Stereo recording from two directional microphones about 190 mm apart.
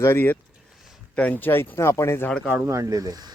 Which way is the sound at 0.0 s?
10° left (ahead or behind).